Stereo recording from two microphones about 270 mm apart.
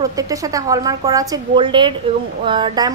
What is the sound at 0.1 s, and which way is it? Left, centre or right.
A woman's voice, centre.